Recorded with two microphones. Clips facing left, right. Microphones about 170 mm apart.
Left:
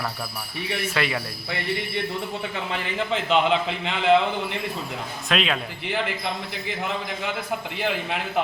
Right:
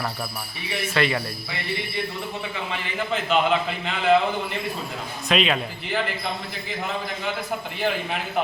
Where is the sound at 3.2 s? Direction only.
20° left (ahead or behind).